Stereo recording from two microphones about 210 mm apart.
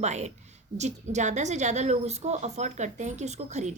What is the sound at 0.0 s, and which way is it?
A woman's voice, 30° right (ahead or behind).